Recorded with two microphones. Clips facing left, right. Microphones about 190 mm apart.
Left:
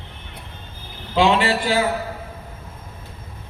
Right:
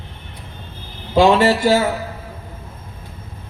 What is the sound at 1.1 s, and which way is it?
Speech, 45° right (ahead or behind).